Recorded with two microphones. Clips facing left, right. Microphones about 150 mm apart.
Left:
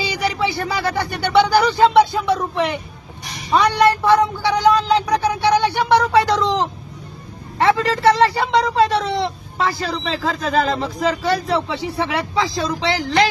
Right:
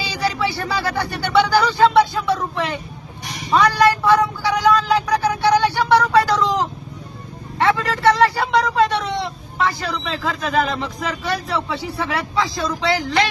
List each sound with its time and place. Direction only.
0.0 s speech: 20° left (ahead or behind)
3.5 s a sound: 25° left (ahead or behind)
7.5 s speech: 25° left (ahead or behind)